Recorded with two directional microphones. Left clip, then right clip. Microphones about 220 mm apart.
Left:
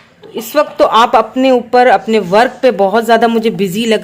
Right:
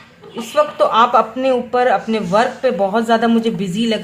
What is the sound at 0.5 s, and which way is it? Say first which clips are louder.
A woman's voice: left 4 dB; 40° left (ahead or behind).